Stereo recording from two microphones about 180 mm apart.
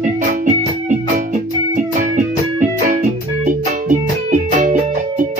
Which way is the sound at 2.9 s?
45° right (ahead or behind).